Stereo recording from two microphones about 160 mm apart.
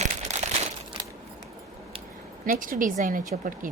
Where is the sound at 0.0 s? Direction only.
45° right (ahead or behind).